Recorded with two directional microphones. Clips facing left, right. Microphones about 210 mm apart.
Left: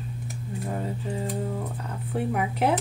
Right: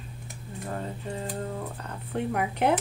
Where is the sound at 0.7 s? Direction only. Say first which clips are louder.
Left 2 dB; 10° left (ahead or behind).